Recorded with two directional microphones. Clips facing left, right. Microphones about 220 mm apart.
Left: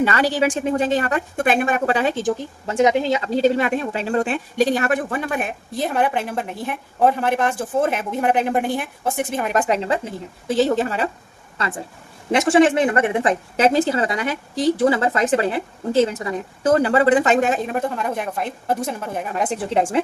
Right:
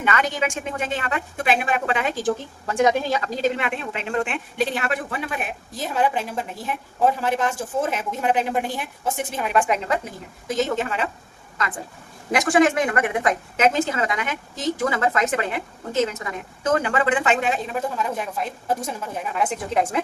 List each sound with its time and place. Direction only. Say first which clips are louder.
0.0 s a woman's voice: left 5 dB; 35° left (ahead or behind)
2.2 s a woman's voice: left 1 dB; 20° left (ahead or behind); by 11.1 s 35° left (ahead or behind)
12.3 s a woman's voice: left 3 dB; 25° left (ahead or behind); by 19.4 s 55° left (ahead or behind)
19.4 s a woman's voice: left 2 dB; 35° left (ahead or behind)